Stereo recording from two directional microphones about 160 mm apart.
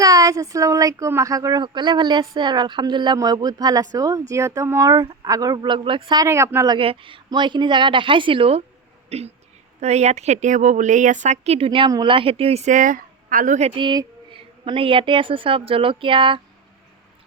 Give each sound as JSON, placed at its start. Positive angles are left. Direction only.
{"t": 0.0, "sound": "speech", "side_deg": -20}
{"t": 6.7, "sound": "a woman's voice", "side_deg": -35}
{"t": 13.7, "sound": "a woman's voice", "side_deg": -30}